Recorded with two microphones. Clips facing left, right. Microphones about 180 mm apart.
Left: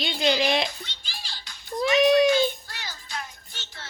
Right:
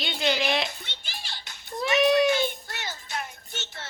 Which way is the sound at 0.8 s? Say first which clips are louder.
Even; 60° right (ahead or behind).